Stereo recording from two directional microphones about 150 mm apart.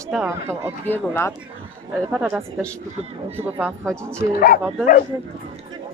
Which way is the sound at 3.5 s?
15° right (ahead or behind).